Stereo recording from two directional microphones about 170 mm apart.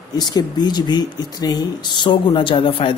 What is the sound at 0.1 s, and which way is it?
Speech, 25° left (ahead or behind).